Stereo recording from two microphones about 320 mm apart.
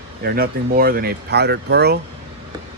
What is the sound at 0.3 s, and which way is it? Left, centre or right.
Speech, right.